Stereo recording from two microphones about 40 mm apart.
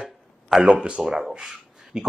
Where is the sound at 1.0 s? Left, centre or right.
Centre.